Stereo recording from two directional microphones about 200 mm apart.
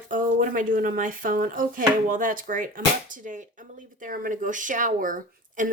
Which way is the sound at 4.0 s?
45° right (ahead or behind).